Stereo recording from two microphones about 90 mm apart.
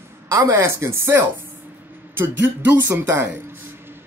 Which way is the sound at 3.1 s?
25° right (ahead or behind).